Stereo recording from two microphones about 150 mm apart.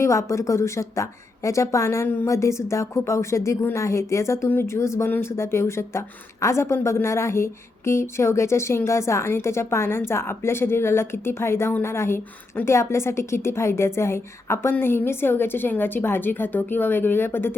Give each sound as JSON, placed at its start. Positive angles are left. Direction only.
{"t": 0.0, "sound": "a woman's voice", "side_deg": 20}